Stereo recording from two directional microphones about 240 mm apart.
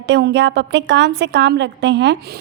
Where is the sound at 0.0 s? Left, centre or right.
Right.